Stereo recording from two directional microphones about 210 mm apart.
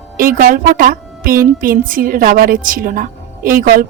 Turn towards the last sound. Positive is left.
turn(degrees=-40)  # may be behind; listen again after turning